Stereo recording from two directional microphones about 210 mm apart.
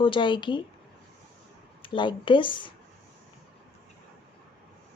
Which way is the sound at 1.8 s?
25° left (ahead or behind).